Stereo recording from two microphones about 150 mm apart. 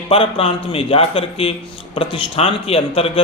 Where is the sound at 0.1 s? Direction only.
40° left (ahead or behind).